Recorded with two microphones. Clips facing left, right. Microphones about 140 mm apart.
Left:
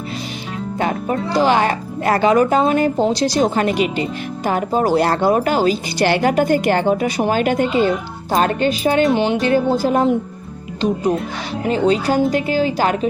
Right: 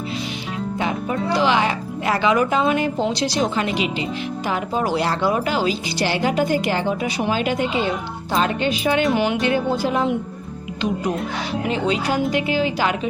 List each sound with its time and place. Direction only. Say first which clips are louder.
0.8 s speech: left 4 dB; 45° left (ahead or behind)
9.1 s speech: left 3 dB; 30° left (ahead or behind)
11.7 s speech: left 6 dB; 40° left (ahead or behind)